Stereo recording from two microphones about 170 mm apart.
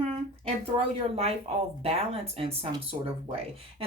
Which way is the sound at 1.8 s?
35° right (ahead or behind).